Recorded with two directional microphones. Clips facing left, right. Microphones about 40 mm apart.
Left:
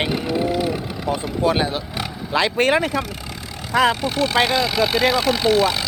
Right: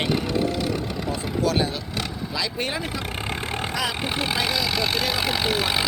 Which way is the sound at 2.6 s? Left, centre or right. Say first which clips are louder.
Left 10 dB; left.